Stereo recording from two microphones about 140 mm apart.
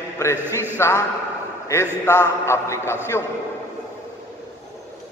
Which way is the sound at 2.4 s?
20° left (ahead or behind).